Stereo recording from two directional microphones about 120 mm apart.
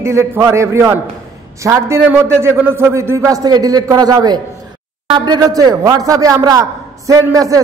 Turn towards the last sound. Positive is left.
turn(degrees=-25)  # may be behind; listen again after turning